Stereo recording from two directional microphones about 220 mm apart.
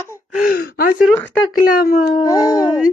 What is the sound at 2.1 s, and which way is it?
Speech, 15° left (ahead or behind).